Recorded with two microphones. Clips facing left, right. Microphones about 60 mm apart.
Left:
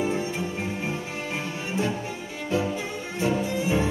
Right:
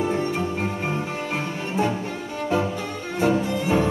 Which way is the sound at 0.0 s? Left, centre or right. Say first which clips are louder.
Right 3 dB; right.